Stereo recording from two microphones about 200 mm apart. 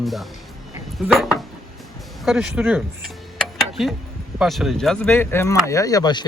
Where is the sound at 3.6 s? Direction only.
Centre (ahead or behind).